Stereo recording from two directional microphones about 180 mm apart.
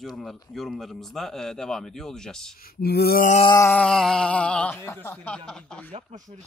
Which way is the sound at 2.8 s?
60° left (ahead or behind).